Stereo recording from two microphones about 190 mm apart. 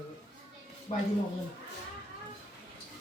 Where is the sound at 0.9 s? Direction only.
35° left (ahead or behind).